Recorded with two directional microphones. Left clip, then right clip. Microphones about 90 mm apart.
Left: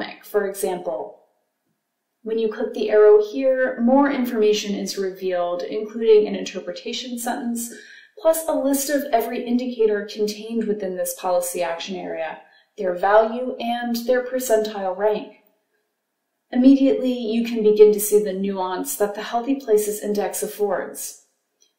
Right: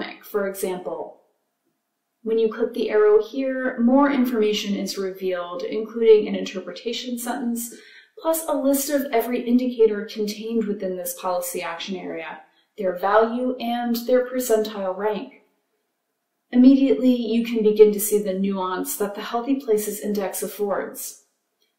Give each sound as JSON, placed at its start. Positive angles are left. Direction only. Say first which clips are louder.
{"t": 0.0, "sound": "a woman's voice", "louder": "left 2 dB", "side_deg": 40}
{"t": 2.2, "sound": "a woman's voice", "louder": "right 2 dB", "side_deg": 35}
{"t": 16.4, "sound": "a woman's voice", "louder": "even", "side_deg": 35}